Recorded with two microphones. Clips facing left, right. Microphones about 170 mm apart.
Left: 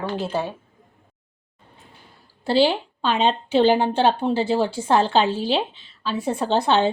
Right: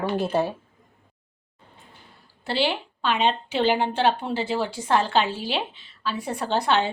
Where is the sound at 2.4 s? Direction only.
35° left (ahead or behind).